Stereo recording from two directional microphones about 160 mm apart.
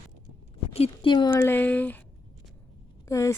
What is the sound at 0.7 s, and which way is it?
Speech, 35° left (ahead or behind).